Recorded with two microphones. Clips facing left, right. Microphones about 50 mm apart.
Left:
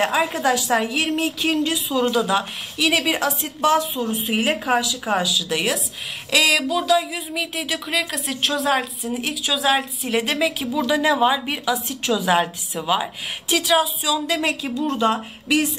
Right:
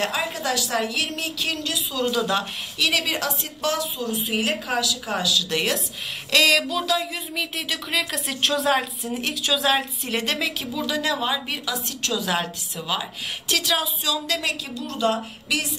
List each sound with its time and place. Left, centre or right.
0.0 s a woman's voice: centre
2.1 s speech: centre; by 4.2 s left
4.3 s speech: centre